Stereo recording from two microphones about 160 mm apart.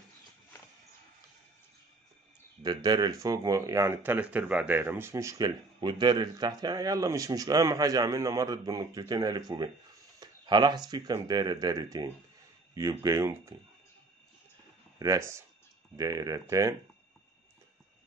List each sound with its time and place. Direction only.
2.6 s speech: 25° right (ahead or behind)
10.1 s a sound: 25° right (ahead or behind)
10.9 s speech: 25° right (ahead or behind)
15.0 s speech: 20° right (ahead or behind)